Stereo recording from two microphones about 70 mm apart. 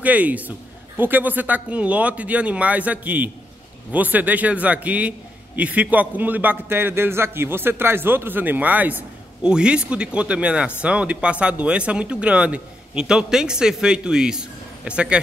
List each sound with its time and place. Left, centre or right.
0.0 s a man's voice: right
9.4 s speech: centre